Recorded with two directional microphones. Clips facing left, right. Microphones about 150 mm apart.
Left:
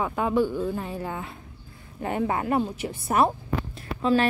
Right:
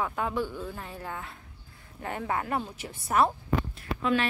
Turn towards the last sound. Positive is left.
turn(degrees=35)  # may be behind; listen again after turning